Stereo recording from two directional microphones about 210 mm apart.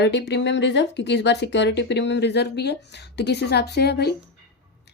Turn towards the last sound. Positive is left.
turn(degrees=50)  # may be behind; listen again after turning